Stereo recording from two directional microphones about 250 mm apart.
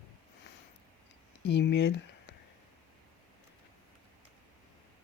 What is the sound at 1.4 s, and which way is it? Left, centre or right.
Speech, left.